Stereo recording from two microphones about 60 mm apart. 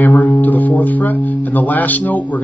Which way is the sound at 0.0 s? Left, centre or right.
Left.